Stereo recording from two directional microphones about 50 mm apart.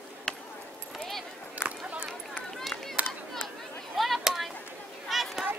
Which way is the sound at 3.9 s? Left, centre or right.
Centre.